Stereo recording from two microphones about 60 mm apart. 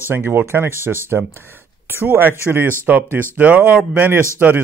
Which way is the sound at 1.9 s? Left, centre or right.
Right.